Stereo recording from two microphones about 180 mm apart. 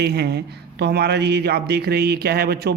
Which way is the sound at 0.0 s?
65° right (ahead or behind).